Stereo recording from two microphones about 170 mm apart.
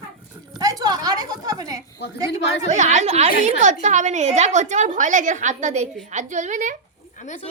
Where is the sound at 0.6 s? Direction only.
20° right (ahead or behind).